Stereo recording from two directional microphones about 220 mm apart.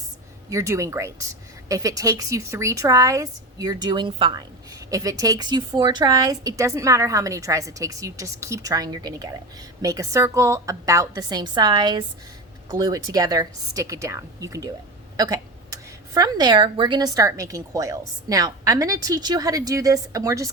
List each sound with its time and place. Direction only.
0.5 s speech: 15° right (ahead or behind)